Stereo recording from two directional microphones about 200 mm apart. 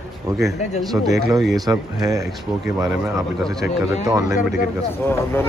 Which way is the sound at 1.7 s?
20° right (ahead or behind).